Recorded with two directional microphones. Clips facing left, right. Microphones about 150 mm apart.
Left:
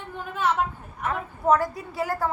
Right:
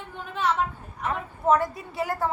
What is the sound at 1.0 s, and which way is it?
A woman's voice, 20° right (ahead or behind).